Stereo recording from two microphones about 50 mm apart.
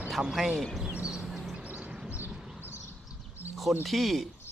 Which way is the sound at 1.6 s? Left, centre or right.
Right.